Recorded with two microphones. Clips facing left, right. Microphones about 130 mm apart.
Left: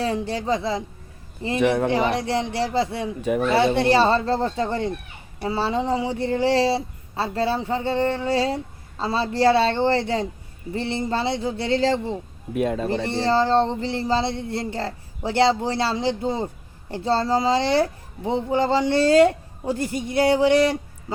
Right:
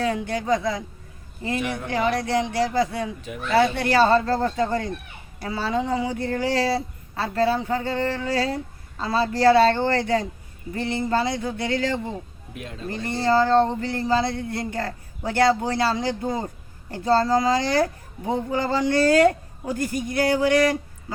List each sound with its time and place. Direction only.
0.0 s speech: 30° left (ahead or behind)
3.2 s speech: 55° left (ahead or behind)
3.8 s speech: 25° left (ahead or behind)
13.2 s speech: 30° left (ahead or behind)